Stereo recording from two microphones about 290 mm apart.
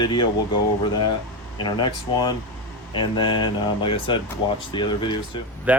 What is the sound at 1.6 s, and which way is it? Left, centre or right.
Speech, centre.